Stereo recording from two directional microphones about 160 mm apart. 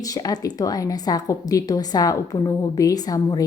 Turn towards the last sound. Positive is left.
turn(degrees=25)  # may be behind; listen again after turning